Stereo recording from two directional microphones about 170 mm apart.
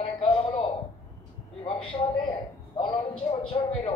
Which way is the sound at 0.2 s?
30° left (ahead or behind).